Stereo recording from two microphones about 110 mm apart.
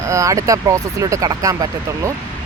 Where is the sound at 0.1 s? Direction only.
30° right (ahead or behind).